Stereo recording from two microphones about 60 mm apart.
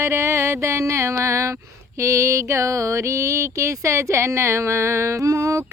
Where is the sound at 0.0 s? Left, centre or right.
Right.